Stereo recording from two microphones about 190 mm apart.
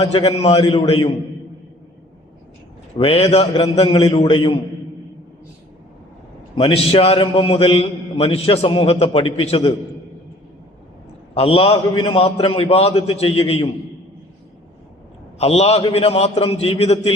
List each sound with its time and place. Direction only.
0.0 s a man's voice: 25° left (ahead or behind)
3.0 s a man's voice: 30° left (ahead or behind)
6.6 s a man's voice: 30° left (ahead or behind)
11.3 s a man's voice: 30° left (ahead or behind)
15.4 s a man's voice: 35° left (ahead or behind)